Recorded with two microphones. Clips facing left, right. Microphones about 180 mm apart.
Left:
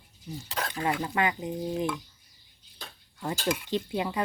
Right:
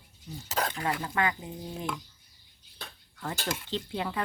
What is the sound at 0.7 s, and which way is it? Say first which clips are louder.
Speech: left 3 dB; 20° left (ahead or behind).